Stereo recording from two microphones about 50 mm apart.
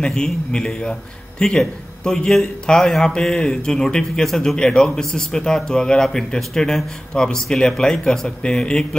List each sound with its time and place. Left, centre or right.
0.0 s a man's voice: centre